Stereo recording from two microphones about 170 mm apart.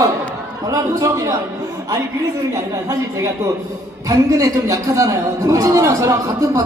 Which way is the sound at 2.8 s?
20° right (ahead or behind).